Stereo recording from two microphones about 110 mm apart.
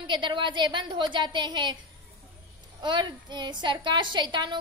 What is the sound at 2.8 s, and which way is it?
A woman's voice, 45° right (ahead or behind).